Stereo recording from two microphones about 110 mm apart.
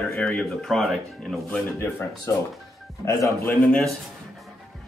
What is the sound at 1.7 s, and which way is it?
Speech, 25° left (ahead or behind).